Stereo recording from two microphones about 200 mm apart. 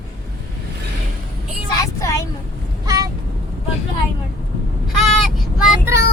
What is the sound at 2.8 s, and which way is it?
Vehicle, 20° right (ahead or behind).